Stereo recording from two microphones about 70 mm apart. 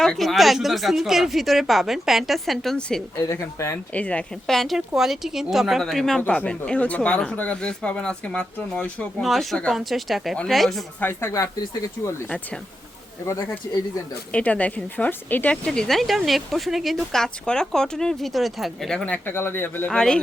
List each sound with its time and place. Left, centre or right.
0.0 s speech: centre
3.2 s speech: left
3.9 s speech: centre
4.4 s speech: centre
6.2 s speech: centre
9.2 s speech: centre
11.3 s speech: left
14.3 s speech: centre
15.6 s speech: centre
19.0 s speech: left
19.9 s speech: centre